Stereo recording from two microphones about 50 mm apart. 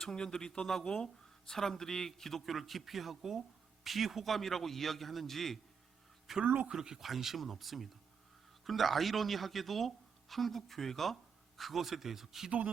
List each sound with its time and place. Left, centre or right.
0.0 s speech: centre
12.5 s speech: right